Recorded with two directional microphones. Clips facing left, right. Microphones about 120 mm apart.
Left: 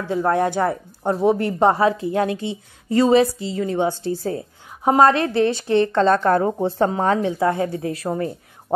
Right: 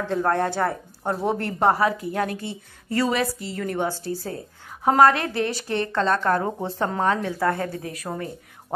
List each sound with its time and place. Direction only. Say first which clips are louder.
0.1 s a woman's voice: left 4 dB; 15° left (ahead or behind)
7.8 s speech: left 7 dB; 30° left (ahead or behind)